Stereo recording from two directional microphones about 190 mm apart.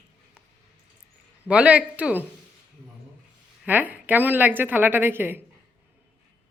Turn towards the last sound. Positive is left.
turn(degrees=-10)  # may be behind; listen again after turning